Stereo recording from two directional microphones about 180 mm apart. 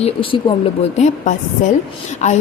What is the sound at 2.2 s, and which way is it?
Speech, 40° left (ahead or behind).